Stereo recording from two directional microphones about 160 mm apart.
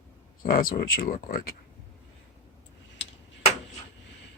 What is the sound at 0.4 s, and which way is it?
Speech, 65° left (ahead or behind).